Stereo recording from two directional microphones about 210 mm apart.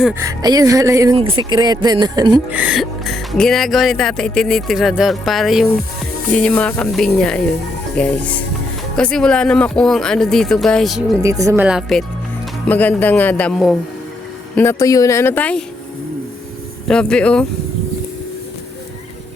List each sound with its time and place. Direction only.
0.2 s speech: 15° right (ahead or behind)
2.5 s speech: 5° right (ahead or behind)
11.2 s speech: 15° right (ahead or behind); by 15.6 s 5° left (ahead or behind)
16.9 s speech: 5° left (ahead or behind)